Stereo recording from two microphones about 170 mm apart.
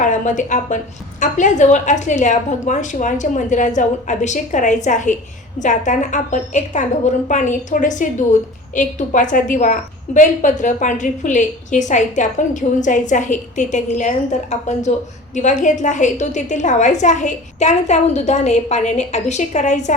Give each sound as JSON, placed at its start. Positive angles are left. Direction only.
{"t": 0.0, "sound": "a woman's voice", "side_deg": 50}